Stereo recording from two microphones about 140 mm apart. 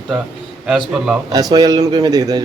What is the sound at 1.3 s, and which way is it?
A man's voice, 30° right (ahead or behind).